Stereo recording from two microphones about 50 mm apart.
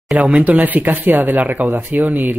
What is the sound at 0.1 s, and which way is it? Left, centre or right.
Speech, right.